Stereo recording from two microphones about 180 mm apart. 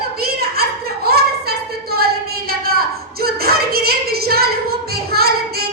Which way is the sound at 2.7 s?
55° right (ahead or behind).